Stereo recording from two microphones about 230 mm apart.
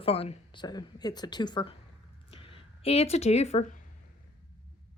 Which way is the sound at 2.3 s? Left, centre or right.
Left.